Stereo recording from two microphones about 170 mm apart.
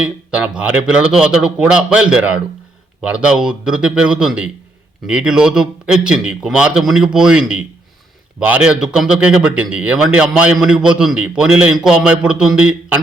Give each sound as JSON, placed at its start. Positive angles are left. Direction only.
{"t": 0.0, "sound": "a man's voice", "side_deg": -5}